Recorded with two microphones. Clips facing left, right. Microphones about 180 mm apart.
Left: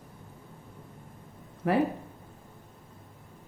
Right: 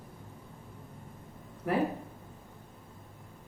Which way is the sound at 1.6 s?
70° left (ahead or behind).